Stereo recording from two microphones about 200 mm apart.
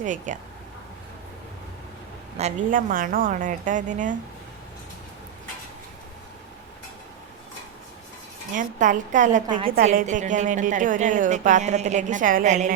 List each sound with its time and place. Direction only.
0.0 s a woman's voice: 40° right (ahead or behind)
2.4 s a woman's voice: 45° right (ahead or behind)
8.5 s a woman's voice: 40° right (ahead or behind)